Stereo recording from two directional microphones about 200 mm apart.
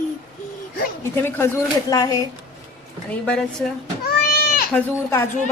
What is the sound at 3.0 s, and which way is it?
Speech, 5° left (ahead or behind).